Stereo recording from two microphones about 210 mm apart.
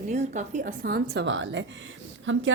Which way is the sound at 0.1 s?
35° right (ahead or behind).